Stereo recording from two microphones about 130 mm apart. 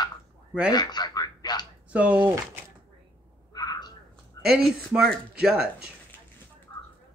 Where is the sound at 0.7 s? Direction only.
30° left (ahead or behind).